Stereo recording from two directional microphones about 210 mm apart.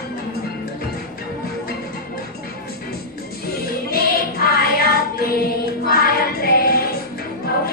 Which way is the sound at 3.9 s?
45° left (ahead or behind).